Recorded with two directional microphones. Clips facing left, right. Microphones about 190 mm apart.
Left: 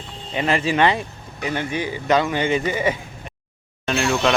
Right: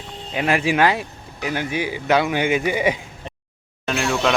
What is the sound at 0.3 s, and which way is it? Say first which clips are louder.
Speech: right 1 dB; 10° right (ahead or behind).